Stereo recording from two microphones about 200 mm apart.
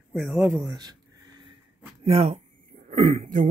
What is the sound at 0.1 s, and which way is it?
Speech, centre (ahead or behind).